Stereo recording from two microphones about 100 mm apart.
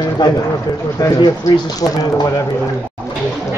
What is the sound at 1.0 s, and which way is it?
Speech, 30° left (ahead or behind).